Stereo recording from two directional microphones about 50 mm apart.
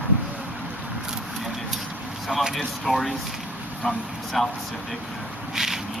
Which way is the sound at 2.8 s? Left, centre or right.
Centre.